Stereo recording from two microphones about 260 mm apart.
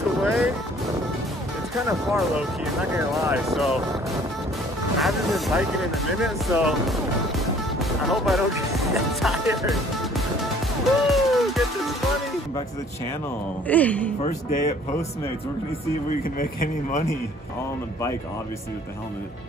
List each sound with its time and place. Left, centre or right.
0.2 s music: centre
2.0 s speech: centre
8.7 s music: centre
13.7 s speech: centre
14.2 s speech: left
16.1 s speech: left